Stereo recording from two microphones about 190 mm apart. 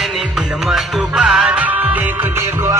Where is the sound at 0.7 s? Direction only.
5° right (ahead or behind).